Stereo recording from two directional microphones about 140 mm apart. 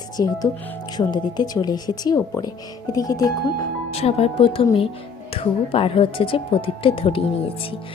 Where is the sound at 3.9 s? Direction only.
45° left (ahead or behind).